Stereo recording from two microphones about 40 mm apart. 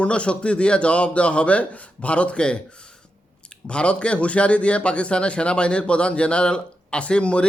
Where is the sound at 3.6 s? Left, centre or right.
Left.